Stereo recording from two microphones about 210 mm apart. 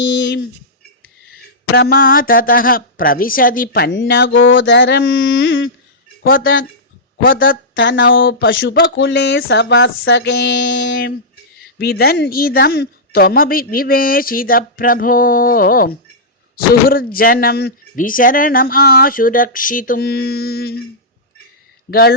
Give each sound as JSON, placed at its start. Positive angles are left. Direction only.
{"t": 1.3, "sound": "speech", "side_deg": 45}
{"t": 6.2, "sound": "speech", "side_deg": 45}
{"t": 7.8, "sound": "speech", "side_deg": 60}
{"t": 11.8, "sound": "speech", "side_deg": 50}
{"t": 21.8, "sound": "speech", "side_deg": 50}